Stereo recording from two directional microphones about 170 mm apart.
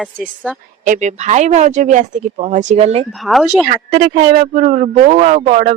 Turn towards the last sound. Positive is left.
turn(degrees=-40)  # may be behind; listen again after turning